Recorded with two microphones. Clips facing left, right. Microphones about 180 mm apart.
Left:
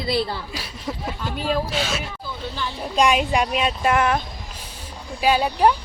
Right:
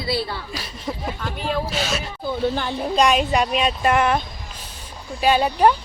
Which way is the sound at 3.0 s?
10° left (ahead or behind).